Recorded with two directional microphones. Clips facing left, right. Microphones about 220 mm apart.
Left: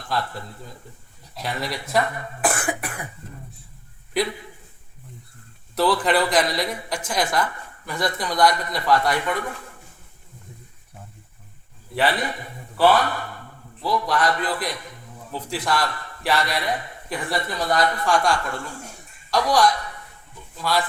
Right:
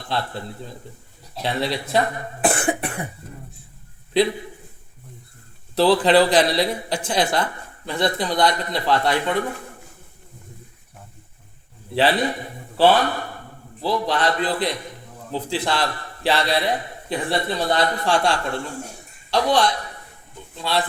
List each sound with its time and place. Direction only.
0.1 s a man's voice: 30° right (ahead or behind)
2.4 s cough: 25° right (ahead or behind)
5.7 s a man's voice: 30° right (ahead or behind)
11.9 s a man's voice: 30° right (ahead or behind)